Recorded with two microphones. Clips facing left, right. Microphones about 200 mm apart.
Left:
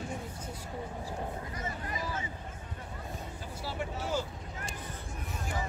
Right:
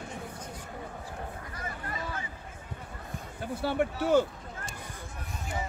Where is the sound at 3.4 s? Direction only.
60° right (ahead or behind).